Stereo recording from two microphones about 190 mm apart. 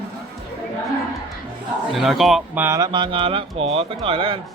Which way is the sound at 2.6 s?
15° right (ahead or behind).